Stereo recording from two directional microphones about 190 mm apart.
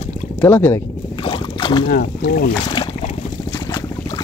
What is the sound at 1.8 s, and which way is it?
Speech, 50° left (ahead or behind).